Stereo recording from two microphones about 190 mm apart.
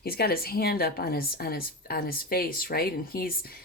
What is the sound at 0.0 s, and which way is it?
Speech, 55° left (ahead or behind).